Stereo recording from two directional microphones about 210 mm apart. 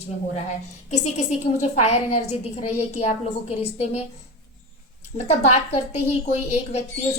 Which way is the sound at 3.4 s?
30° left (ahead or behind).